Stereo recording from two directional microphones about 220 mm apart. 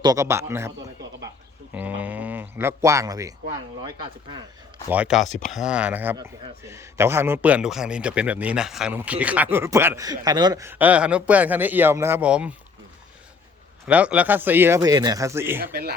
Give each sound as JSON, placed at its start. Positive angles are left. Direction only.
{"t": 0.0, "sound": "a man's voice", "side_deg": -15}
{"t": 4.9, "sound": "speech", "side_deg": -5}
{"t": 5.2, "sound": "speech", "side_deg": 35}
{"t": 5.5, "sound": "a man's voice", "side_deg": 0}
{"t": 13.8, "sound": "a man's voice", "side_deg": -5}
{"t": 15.6, "sound": "speech", "side_deg": -40}